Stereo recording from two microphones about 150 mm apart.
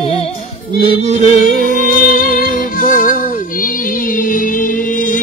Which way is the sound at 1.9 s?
70° left (ahead or behind).